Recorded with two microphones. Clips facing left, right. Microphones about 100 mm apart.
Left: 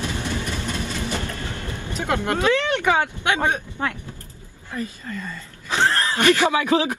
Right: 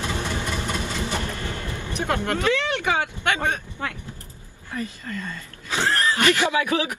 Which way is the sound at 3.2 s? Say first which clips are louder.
Left 1 dB; 20° right (ahead or behind).